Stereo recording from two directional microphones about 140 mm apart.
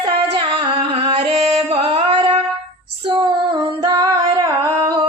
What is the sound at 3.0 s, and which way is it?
Female singing, 40° right (ahead or behind).